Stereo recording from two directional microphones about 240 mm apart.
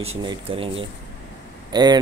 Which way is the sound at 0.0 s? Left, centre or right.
Right.